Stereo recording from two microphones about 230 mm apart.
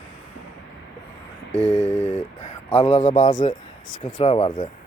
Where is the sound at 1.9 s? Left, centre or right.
Left.